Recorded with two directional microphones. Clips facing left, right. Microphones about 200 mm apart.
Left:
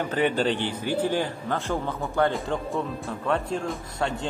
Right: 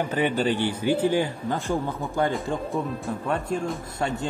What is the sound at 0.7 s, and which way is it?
Speech, 55° right (ahead or behind).